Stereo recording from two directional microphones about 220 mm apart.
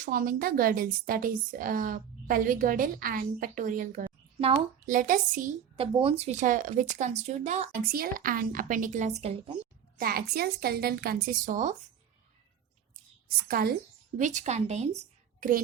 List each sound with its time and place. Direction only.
0.0 s speech: 40° right (ahead or behind)
4.4 s a woman's voice: 25° right (ahead or behind)
4.9 s speech: 40° right (ahead or behind)
10.0 s a woman's voice: 45° right (ahead or behind)
13.5 s a woman's voice: 40° right (ahead or behind)